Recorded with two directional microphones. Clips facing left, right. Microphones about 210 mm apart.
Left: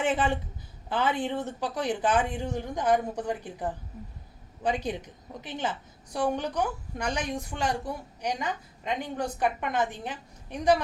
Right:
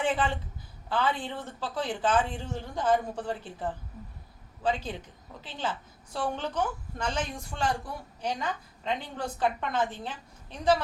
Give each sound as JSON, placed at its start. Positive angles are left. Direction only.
{"t": 0.0, "sound": "a woman's voice", "side_deg": 20}